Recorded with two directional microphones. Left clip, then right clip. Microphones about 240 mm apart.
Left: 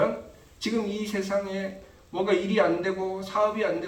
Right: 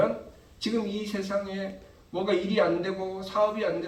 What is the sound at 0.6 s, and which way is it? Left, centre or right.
A man's voice, left.